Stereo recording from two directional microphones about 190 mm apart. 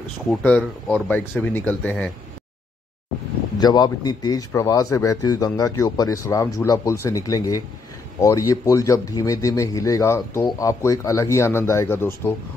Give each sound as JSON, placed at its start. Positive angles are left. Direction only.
{"t": 0.3, "sound": "speech", "side_deg": 5}
{"t": 3.5, "sound": "speech", "side_deg": 20}